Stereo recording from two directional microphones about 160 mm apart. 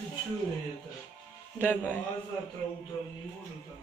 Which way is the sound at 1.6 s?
10° left (ahead or behind).